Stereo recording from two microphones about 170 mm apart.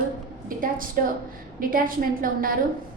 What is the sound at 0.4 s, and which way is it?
A woman's voice, 55° right (ahead or behind).